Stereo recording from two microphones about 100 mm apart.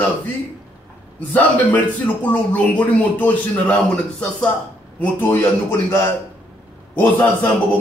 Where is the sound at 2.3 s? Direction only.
15° left (ahead or behind).